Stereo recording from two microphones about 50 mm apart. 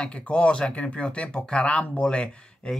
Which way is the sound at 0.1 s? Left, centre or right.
Left.